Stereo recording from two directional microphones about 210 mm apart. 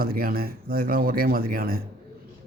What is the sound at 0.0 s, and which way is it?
Speech, 45° right (ahead or behind).